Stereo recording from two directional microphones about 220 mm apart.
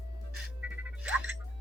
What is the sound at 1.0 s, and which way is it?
Music, 5° right (ahead or behind).